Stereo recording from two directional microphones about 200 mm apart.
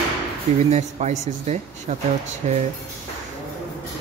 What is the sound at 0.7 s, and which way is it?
Speech, 35° right (ahead or behind).